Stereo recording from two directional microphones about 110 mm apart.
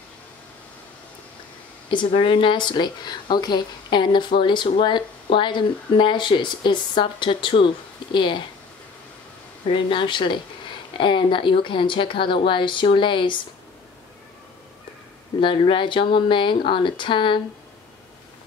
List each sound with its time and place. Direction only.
1.9 s speech: 50° left (ahead or behind)
9.7 s speech: 50° left (ahead or behind)
15.4 s speech: 50° left (ahead or behind)